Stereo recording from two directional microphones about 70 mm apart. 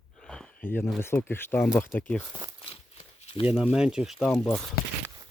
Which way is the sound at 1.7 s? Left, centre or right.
Left.